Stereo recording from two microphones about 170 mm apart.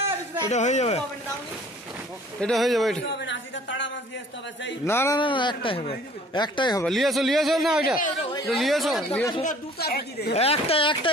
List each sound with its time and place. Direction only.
0.5 s speech: 45° left (ahead or behind)
2.4 s speech: centre (ahead or behind)
3.2 s a woman's voice: 90° left
4.8 s speech: 15° left (ahead or behind)
5.2 s speech: 30° left (ahead or behind)
6.8 s speech: centre (ahead or behind)
8.2 s speech: 25° left (ahead or behind)
8.5 s speech: centre (ahead or behind)
9.8 s a woman's voice: 65° left (ahead or behind)
10.3 s speech: 35° left (ahead or behind)